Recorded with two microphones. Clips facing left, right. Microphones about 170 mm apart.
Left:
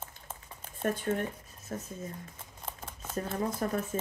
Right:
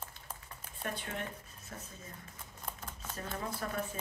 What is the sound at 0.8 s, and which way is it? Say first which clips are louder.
Speech: left 9 dB; 45° left (ahead or behind).